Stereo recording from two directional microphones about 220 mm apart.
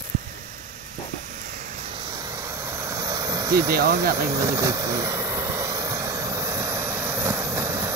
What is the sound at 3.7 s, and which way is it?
Speech, 45° right (ahead or behind).